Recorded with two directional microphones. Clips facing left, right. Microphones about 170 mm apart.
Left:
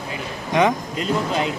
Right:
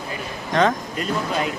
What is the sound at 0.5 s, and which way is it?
Speech, 20° left (ahead or behind).